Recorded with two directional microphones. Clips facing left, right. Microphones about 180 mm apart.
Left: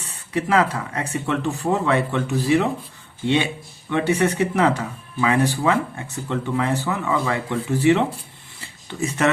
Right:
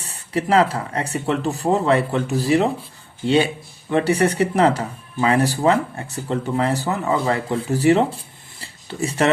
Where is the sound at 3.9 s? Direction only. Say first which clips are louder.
Right 2 dB; 35° right (ahead or behind).